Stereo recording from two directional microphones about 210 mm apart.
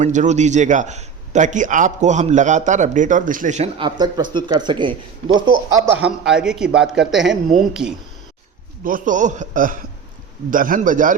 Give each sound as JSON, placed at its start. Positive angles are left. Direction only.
{"t": 0.0, "sound": "a man's voice", "side_deg": -35}
{"t": 5.9, "sound": "a man's voice", "side_deg": -5}
{"t": 8.8, "sound": "a man's voice", "side_deg": -40}